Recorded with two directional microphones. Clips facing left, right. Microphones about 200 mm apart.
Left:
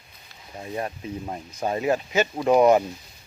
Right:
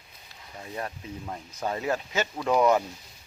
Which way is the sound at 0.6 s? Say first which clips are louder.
Left 5 dB; 20° left (ahead or behind).